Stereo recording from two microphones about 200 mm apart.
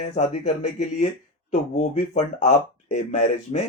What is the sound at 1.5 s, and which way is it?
Speech, 35° left (ahead or behind).